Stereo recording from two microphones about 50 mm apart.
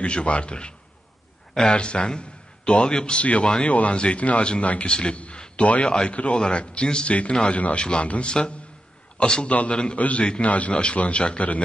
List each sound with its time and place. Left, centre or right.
0.0 s a man's voice: left